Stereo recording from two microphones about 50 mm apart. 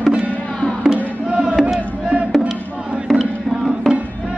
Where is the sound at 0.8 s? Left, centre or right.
Centre.